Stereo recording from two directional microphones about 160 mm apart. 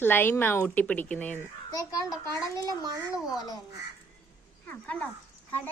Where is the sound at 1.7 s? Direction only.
25° left (ahead or behind).